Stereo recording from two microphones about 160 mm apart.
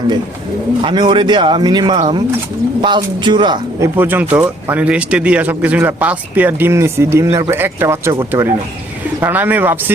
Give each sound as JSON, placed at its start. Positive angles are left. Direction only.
{"t": 0.8, "sound": "speech", "side_deg": -30}
{"t": 3.8, "sound": "speech", "side_deg": -10}